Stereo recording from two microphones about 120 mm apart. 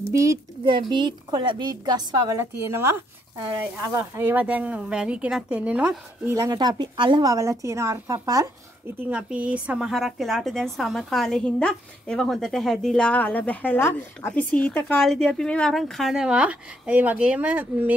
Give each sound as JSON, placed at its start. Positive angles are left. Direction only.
{"t": 0.1, "sound": "a woman's voice", "side_deg": -25}
{"t": 0.7, "sound": "a woman's voice", "side_deg": -40}
{"t": 2.3, "sound": "a woman's voice", "side_deg": -20}
{"t": 6.3, "sound": "a woman's voice", "side_deg": -30}
{"t": 9.1, "sound": "a woman's voice", "side_deg": -10}